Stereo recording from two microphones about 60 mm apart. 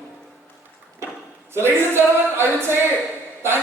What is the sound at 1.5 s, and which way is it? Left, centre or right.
A capella, right.